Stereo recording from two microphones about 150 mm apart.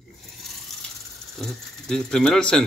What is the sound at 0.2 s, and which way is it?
Speech, centre (ahead or behind).